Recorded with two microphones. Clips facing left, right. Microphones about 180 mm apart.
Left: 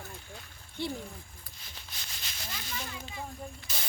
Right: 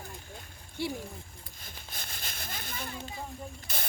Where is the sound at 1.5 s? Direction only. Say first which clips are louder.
Right 4 dB; 50° right (ahead or behind).